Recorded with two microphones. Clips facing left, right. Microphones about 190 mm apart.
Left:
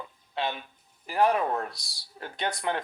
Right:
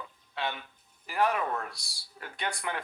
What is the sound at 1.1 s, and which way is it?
Speech, 35° left (ahead or behind).